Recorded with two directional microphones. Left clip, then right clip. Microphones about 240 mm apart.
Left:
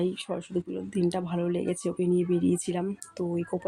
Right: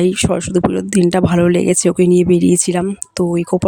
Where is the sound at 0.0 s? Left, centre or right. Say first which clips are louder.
Right 15 dB; right.